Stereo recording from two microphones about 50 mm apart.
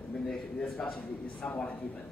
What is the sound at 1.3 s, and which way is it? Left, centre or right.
Speech, left.